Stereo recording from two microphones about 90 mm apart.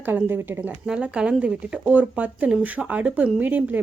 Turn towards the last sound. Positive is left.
turn(degrees=-20)  # may be behind; listen again after turning